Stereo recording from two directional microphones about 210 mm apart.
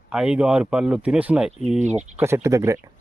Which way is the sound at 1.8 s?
35° right (ahead or behind).